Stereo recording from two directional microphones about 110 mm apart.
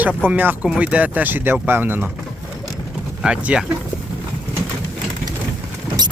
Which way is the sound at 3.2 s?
10° right (ahead or behind).